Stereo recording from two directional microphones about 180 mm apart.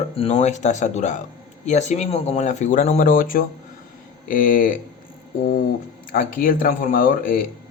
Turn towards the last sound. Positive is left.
turn(degrees=50)  # may be behind; listen again after turning